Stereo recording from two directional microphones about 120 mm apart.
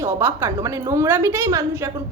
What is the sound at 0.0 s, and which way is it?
A woman's voice, 20° right (ahead or behind).